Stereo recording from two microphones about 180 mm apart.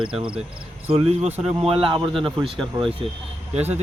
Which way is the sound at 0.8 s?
35° right (ahead or behind).